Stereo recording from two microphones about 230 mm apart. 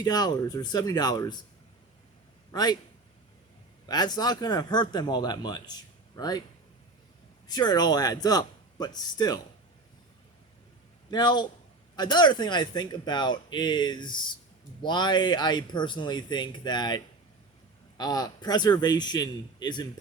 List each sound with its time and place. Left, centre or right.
0.0 s speech: centre
2.5 s a man's voice: centre
3.8 s speech: centre
7.4 s speech: centre
11.1 s speech: centre